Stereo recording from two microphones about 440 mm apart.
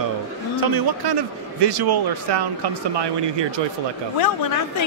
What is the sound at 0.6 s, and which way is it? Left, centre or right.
A man's voice, right.